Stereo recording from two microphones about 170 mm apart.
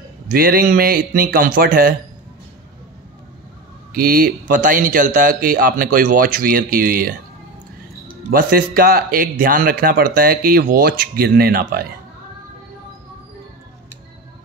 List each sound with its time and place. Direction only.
0.3 s speech: 60° right (ahead or behind)
3.9 s speech: 60° right (ahead or behind)
8.3 s speech: 60° right (ahead or behind)